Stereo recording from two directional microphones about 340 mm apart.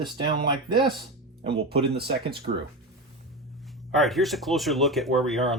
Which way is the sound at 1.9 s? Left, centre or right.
Right.